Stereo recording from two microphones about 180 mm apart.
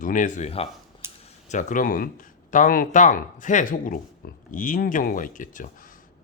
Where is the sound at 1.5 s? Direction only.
45° left (ahead or behind).